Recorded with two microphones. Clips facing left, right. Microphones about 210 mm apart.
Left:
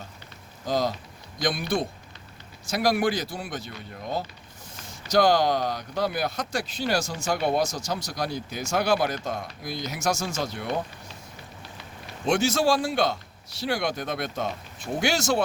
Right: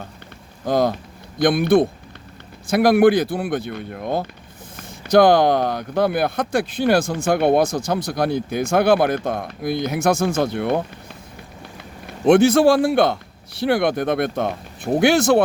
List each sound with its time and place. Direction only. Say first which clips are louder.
0.6 s speech: right 7 dB; 55° right (ahead or behind)
12.2 s speech: right 10 dB; 55° right (ahead or behind)